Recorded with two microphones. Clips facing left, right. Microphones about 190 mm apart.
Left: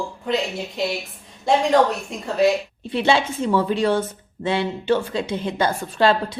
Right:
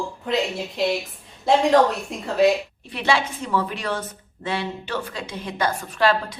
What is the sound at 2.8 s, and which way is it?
A woman's voice, 25° left (ahead or behind).